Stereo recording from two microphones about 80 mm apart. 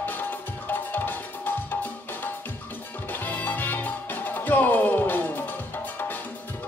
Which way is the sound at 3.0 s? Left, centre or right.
Left.